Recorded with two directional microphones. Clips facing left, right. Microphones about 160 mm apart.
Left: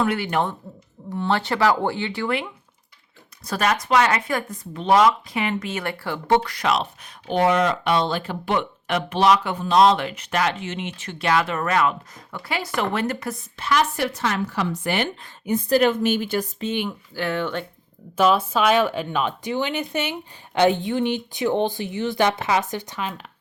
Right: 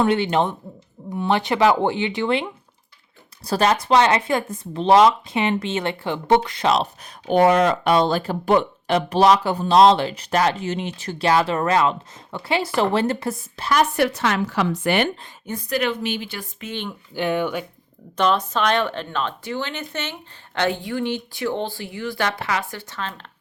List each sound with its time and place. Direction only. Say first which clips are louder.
0.0 s speech: right 3 dB; 25° right (ahead or behind)
7.3 s speech: right 4 dB; 45° right (ahead or behind); by 13.7 s 30° right (ahead or behind)
13.7 s speech: right 3 dB; 60° right (ahead or behind)
15.7 s speech: left 5 dB; 45° left (ahead or behind)
17.2 s speech: right 3 dB; 15° right (ahead or behind)
18.2 s speech: left 1 dB; 5° left (ahead or behind)